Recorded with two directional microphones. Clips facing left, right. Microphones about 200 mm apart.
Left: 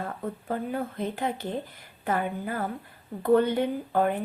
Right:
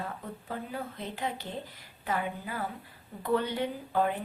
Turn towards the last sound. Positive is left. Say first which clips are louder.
# left 4 dB
turn(degrees=50)  # may be behind; listen again after turning